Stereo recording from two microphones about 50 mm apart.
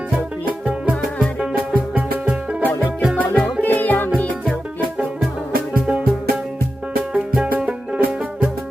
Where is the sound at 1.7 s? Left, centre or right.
Right.